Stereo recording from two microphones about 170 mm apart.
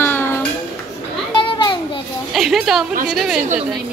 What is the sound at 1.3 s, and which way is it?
Children playing, 30° left (ahead or behind).